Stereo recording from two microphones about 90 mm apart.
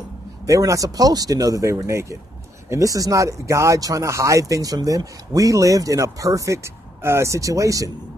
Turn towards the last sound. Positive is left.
turn(degrees=-40)  # may be behind; listen again after turning